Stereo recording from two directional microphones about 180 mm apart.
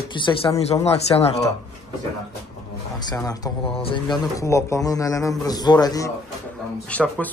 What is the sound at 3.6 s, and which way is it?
Speech, 30° left (ahead or behind).